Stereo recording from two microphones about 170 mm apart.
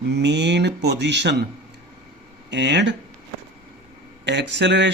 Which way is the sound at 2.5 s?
90° right.